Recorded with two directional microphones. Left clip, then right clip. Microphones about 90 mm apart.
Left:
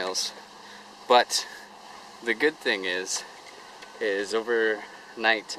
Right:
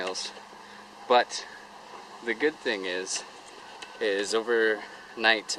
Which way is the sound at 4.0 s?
Centre (ahead or behind).